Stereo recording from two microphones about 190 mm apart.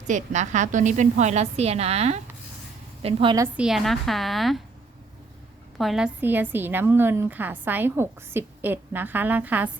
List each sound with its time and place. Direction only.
0.1 s a woman's voice: 40° right (ahead or behind)
3.6 s a woman's voice: centre (ahead or behind)
5.7 s a woman's voice: centre (ahead or behind)